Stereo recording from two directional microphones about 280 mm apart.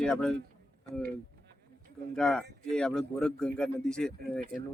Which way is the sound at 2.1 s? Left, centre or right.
Centre.